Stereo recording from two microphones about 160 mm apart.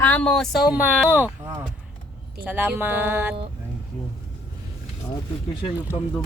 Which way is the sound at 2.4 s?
10° right (ahead or behind).